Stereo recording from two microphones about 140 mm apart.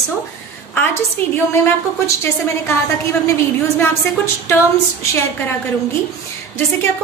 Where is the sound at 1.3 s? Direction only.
20° left (ahead or behind).